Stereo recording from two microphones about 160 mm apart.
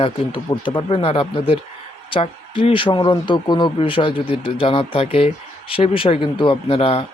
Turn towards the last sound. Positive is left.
turn(degrees=35)  # may be behind; listen again after turning